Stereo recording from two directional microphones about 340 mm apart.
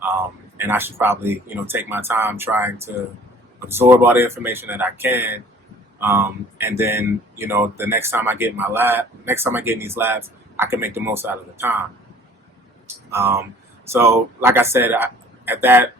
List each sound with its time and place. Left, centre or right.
0.5 s speech: centre
13.1 s speech: centre